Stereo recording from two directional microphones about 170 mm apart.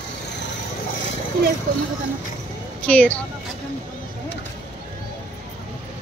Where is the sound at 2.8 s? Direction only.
5° left (ahead or behind).